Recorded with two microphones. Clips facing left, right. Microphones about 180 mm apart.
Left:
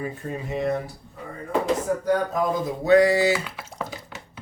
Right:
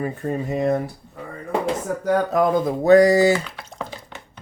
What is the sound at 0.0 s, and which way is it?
Speech, 45° right (ahead or behind).